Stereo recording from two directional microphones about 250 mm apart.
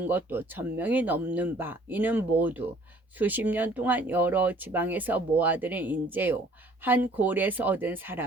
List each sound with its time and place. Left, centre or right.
0.0 s speech: centre